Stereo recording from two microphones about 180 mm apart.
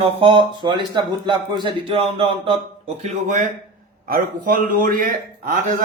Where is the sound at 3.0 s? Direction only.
40° right (ahead or behind).